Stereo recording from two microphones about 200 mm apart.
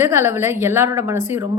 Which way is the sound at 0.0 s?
15° right (ahead or behind).